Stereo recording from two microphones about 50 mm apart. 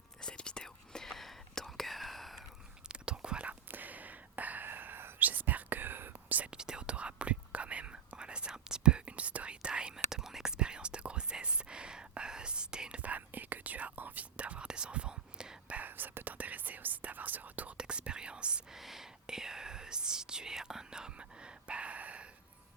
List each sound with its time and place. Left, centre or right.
0.2 s whispering: centre
2.9 s whispering: centre
3.4 s whispering: right
6.5 s whispering: centre
10.6 s whispering: centre
13.0 s whispering: right; by 15.5 s centre
15.6 s whispering: right
15.9 s whispering: right
17.7 s whispering: centre
18.7 s whispering: centre
21.2 s a sound: right